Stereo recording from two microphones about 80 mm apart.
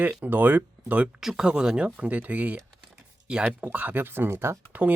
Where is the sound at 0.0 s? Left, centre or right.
Centre.